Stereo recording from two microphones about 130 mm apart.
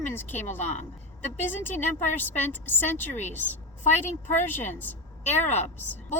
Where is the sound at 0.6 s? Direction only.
60° left (ahead or behind).